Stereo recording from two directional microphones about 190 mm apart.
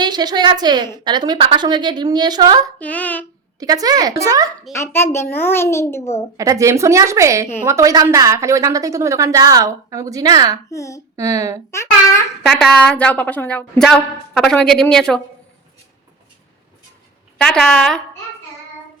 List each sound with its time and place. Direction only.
0.0 s a woman's voice: 20° right (ahead or behind)
2.7 s speech: 10° left (ahead or behind)
3.6 s a woman's voice: 20° right (ahead or behind)
4.7 s speech: 15° left (ahead or behind)
6.3 s a woman's voice: 15° right (ahead or behind)
10.7 s speech: 15° left (ahead or behind)
11.2 s a woman's voice: 15° right (ahead or behind)
11.7 s speech: 15° left (ahead or behind)
12.5 s a woman's voice: 5° left (ahead or behind)
17.3 s a woman's voice: 5° left (ahead or behind)